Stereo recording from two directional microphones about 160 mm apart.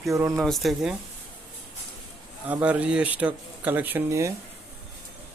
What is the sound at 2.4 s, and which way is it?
Speech, 10° right (ahead or behind).